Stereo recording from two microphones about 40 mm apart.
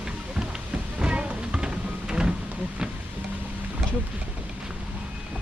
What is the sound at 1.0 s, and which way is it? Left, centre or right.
Music, right.